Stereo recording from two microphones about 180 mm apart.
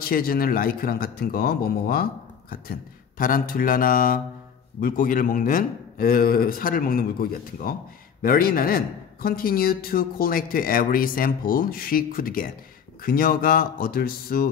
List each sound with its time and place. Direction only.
0.0 s a man's voice: 55° left (ahead or behind)